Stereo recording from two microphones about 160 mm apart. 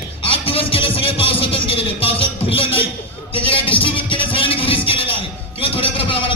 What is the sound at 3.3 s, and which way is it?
Music, 35° left (ahead or behind).